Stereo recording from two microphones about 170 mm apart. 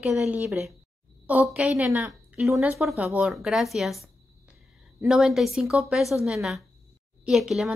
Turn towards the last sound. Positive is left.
turn(degrees=0)  # may be behind; listen again after turning